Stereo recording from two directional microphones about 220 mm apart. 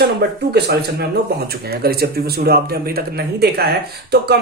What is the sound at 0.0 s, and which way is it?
Speech, 45° right (ahead or behind).